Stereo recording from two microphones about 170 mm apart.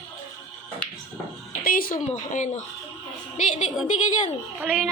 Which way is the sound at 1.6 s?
55° left (ahead or behind).